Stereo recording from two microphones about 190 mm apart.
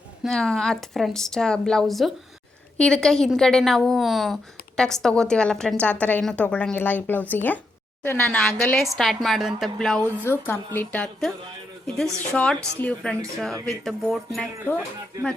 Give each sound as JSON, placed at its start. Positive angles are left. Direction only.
{"t": 0.2, "sound": "a woman's voice", "side_deg": 0}